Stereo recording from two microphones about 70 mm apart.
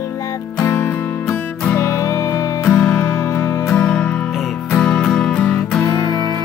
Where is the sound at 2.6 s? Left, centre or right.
Centre.